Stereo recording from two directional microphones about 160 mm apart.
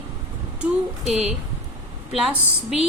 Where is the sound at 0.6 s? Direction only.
Centre (ahead or behind).